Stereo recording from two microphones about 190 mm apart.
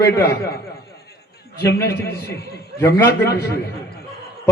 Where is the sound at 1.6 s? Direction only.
60° left (ahead or behind).